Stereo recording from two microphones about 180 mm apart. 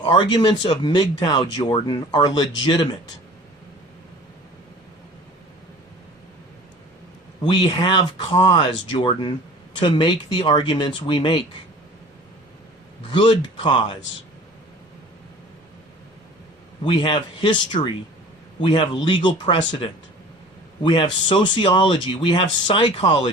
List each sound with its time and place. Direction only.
0.0 s speech: 25° left (ahead or behind)
7.4 s speech: 25° left (ahead or behind)
13.1 s speech: 25° left (ahead or behind)
16.8 s speech: 25° left (ahead or behind)
20.8 s speech: 25° left (ahead or behind)